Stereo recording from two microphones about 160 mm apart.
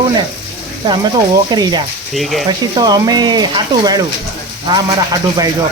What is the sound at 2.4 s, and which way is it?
Speech, 25° right (ahead or behind).